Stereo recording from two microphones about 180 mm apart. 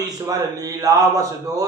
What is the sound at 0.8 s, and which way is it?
Speech, 20° right (ahead or behind).